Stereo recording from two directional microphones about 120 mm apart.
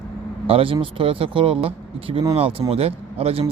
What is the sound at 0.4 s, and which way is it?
Speech, 50° right (ahead or behind).